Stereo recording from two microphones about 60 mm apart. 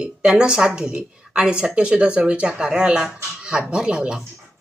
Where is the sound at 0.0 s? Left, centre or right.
Centre.